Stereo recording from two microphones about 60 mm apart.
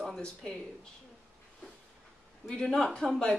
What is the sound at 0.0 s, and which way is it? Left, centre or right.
Speech, centre.